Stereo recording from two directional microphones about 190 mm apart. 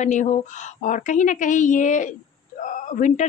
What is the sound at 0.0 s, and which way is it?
A woman's voice, 40° left (ahead or behind).